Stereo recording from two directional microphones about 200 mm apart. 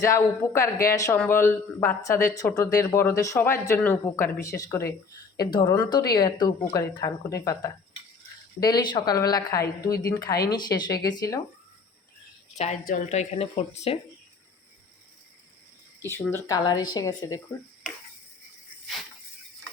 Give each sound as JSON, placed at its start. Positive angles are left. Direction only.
{"t": 0.1, "sound": "a woman's voice", "side_deg": 15}
{"t": 12.5, "sound": "speech", "side_deg": 35}
{"t": 16.0, "sound": "a woman's voice", "side_deg": 10}